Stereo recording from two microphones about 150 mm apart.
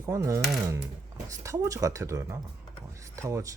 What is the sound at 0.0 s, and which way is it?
Speech, 20° right (ahead or behind).